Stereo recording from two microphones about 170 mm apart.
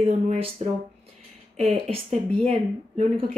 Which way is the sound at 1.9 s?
35° right (ahead or behind).